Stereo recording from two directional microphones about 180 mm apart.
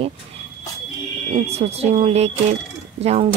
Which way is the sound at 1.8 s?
35° right (ahead or behind).